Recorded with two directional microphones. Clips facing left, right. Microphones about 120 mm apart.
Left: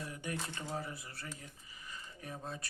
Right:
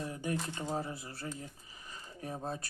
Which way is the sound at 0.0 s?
30° right (ahead or behind).